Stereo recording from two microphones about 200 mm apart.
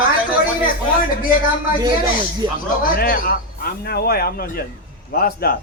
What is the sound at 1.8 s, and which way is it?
Speech, 25° right (ahead or behind).